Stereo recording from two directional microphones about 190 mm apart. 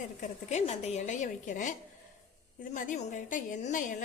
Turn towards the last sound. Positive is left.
turn(degrees=45)  # may be behind; listen again after turning